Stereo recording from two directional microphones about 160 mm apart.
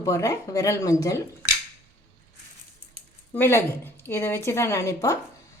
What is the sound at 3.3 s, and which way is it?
A woman's voice, 15° left (ahead or behind).